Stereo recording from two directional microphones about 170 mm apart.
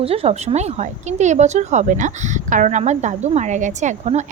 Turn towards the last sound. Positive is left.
turn(degrees=-45)  # may be behind; listen again after turning